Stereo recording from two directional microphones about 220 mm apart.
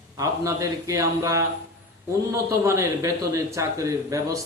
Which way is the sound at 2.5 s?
15° right (ahead or behind).